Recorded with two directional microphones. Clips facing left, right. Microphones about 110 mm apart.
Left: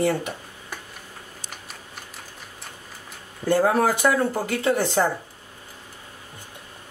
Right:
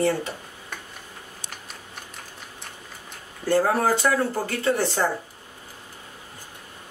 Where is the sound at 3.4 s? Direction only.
20° left (ahead or behind).